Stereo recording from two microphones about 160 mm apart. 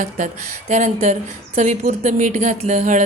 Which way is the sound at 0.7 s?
50° right (ahead or behind).